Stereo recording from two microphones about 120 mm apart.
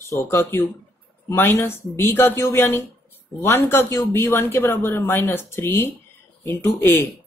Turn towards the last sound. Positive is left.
turn(degrees=20)  # may be behind; listen again after turning